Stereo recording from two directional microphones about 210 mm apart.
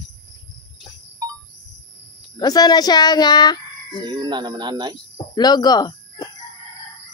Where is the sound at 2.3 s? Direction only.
20° left (ahead or behind).